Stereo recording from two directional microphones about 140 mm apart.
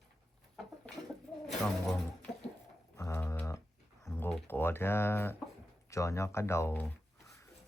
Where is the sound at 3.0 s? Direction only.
20° left (ahead or behind).